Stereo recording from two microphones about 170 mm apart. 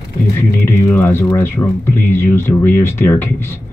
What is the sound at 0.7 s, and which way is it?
Speech, 15° left (ahead or behind).